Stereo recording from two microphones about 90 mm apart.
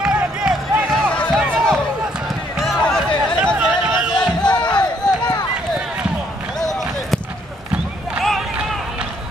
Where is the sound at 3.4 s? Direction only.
10° right (ahead or behind).